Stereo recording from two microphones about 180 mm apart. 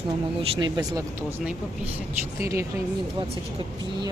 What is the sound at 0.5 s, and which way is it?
Speech, 25° right (ahead or behind).